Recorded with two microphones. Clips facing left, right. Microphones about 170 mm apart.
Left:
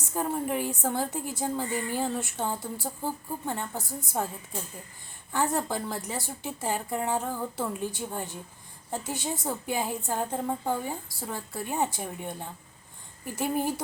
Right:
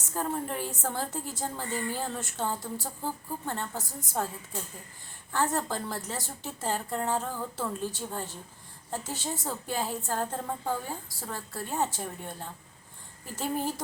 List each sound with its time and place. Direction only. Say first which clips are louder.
0.0 s a woman's voice: left 2 dB; 10° left (ahead or behind)
5.3 s a woman's voice: left 1 dB; 10° left (ahead or behind)